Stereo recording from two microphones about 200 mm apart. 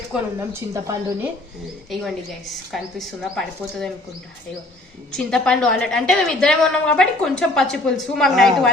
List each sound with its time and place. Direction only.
0.7 s speech: 15° right (ahead or behind)
1.9 s a woman's voice: centre (ahead or behind)
5.1 s a woman's voice: 5° left (ahead or behind)